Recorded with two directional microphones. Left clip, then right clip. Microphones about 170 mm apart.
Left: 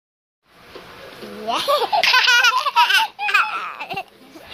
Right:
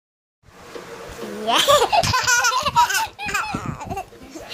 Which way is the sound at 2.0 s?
5° left (ahead or behind).